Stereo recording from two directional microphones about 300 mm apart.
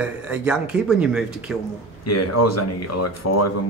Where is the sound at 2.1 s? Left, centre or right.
Left.